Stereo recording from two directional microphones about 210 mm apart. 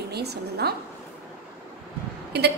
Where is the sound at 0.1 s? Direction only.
50° right (ahead or behind).